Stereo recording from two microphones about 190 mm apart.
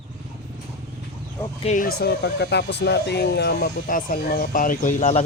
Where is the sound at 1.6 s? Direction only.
45° left (ahead or behind).